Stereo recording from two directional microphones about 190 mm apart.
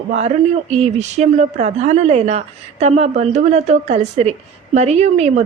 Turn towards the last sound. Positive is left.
turn(degrees=-35)  # may be behind; listen again after turning